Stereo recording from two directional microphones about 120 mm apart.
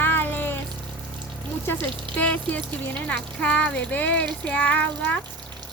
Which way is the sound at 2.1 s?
15° left (ahead or behind).